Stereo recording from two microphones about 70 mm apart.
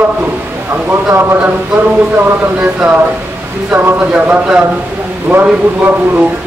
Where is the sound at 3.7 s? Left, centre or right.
Right.